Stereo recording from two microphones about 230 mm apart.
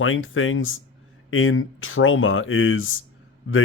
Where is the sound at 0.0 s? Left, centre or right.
Left.